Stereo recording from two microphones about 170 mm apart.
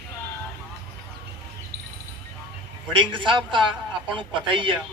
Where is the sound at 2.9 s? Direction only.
30° right (ahead or behind).